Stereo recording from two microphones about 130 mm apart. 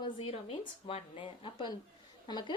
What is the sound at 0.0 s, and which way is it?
A woman's voice, 45° left (ahead or behind).